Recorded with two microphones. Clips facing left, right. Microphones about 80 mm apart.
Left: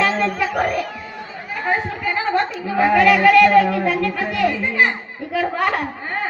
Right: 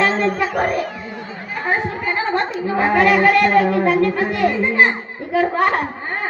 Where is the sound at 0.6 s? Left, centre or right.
Right.